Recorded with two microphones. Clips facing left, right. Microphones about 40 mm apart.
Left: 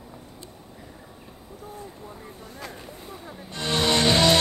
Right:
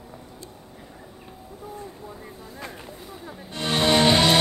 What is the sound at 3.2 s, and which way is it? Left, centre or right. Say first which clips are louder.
Music: right 2 dB; centre.